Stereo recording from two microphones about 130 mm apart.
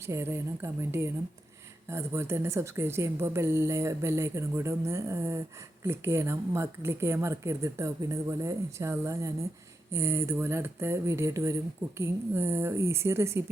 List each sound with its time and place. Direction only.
0.0 s a woman's voice: 20° right (ahead or behind)